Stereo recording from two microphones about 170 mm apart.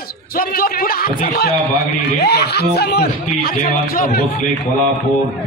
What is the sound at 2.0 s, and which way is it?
Speech, 70° left (ahead or behind).